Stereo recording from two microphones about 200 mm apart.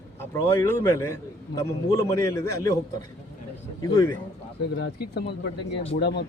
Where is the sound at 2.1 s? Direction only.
15° left (ahead or behind).